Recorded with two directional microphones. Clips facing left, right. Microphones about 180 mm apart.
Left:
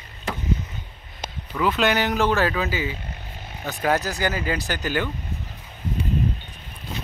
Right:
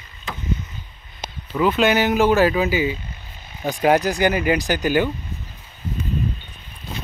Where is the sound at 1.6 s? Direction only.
Centre (ahead or behind).